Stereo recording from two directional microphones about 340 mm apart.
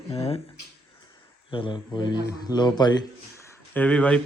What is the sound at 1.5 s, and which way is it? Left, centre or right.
A man's voice, centre.